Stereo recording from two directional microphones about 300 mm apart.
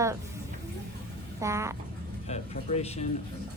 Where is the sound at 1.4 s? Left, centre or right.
Centre.